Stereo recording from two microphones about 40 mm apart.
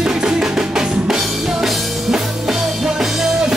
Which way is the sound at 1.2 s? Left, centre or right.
Centre.